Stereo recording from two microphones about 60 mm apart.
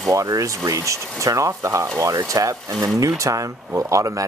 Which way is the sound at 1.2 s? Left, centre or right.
Right.